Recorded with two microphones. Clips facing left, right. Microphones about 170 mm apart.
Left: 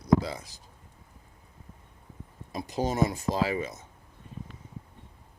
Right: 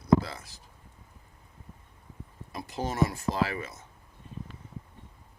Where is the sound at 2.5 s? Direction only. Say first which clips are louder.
Left 4 dB; 20° left (ahead or behind).